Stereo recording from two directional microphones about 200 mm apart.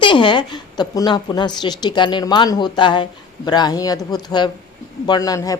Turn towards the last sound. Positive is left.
turn(degrees=15)  # may be behind; listen again after turning